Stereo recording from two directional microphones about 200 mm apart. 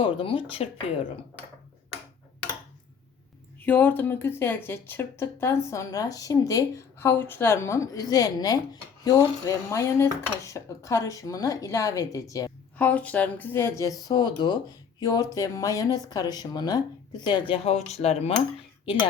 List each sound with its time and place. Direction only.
0.0 s speech: 25° left (ahead or behind)
3.6 s speech: 10° left (ahead or behind); by 18.3 s 30° left (ahead or behind)